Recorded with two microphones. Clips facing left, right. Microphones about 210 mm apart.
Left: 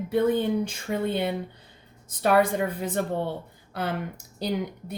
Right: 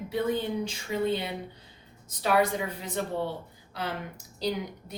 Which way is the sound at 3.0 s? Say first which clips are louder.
Left 1 dB; 50° left (ahead or behind).